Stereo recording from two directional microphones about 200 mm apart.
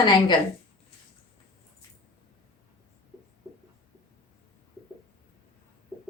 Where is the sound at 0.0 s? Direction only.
20° left (ahead or behind).